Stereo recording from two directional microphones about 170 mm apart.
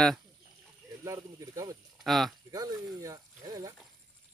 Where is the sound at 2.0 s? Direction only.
Centre (ahead or behind).